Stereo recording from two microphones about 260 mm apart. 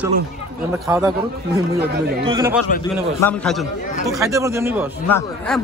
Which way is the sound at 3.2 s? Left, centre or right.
Centre.